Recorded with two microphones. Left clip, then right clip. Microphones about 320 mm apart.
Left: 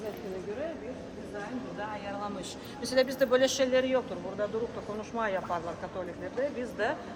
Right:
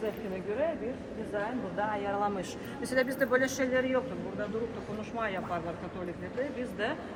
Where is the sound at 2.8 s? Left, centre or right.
Centre.